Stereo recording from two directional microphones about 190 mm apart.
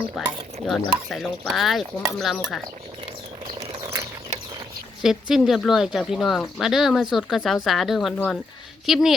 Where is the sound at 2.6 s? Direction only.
25° right (ahead or behind).